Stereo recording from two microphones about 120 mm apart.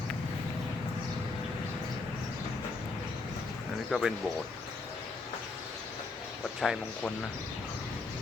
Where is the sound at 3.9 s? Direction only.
5° left (ahead or behind).